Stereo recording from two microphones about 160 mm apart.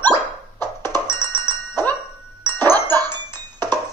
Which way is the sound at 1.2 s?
25° right (ahead or behind).